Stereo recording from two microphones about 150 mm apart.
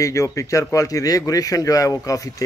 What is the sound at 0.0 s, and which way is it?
Speech, 20° left (ahead or behind).